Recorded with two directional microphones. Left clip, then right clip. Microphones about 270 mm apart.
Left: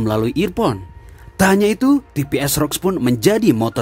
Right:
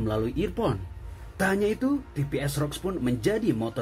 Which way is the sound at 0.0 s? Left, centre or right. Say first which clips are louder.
Left 10 dB; left.